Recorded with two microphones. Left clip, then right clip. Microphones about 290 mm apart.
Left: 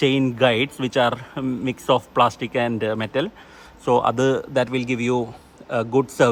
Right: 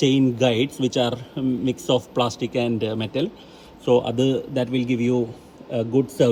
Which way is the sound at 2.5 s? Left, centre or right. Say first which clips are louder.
Left 2 dB; left.